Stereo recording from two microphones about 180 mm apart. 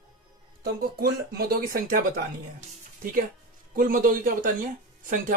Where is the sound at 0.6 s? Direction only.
55° right (ahead or behind).